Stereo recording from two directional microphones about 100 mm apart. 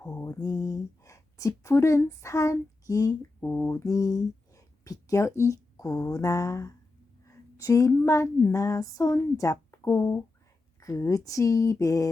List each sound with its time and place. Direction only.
0.0 s mantra: 25° left (ahead or behind)
0.3 s speech: 40° left (ahead or behind)
3.4 s speech: 20° left (ahead or behind)
8.5 s a sound: 30° left (ahead or behind)